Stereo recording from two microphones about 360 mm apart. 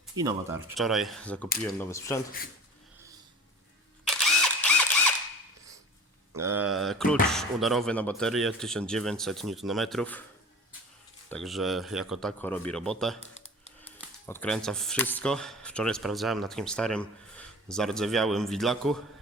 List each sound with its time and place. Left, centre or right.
0.0 s speech: centre
4.7 s a sound: centre
6.3 s speech: centre
11.3 s speech: centre
13.1 s typing: centre
13.8 s speech: centre